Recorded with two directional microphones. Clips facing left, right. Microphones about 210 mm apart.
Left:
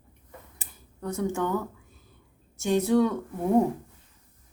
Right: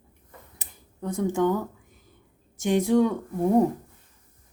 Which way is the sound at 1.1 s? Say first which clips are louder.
Right 4 dB; 15° right (ahead or behind).